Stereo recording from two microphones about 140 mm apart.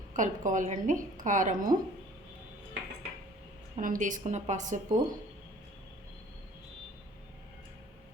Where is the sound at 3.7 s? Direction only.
70° right (ahead or behind).